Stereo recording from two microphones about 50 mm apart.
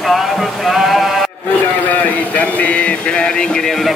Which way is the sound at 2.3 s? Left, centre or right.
Left.